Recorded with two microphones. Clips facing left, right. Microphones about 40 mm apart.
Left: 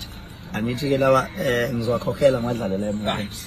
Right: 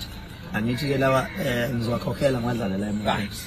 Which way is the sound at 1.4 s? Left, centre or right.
Left.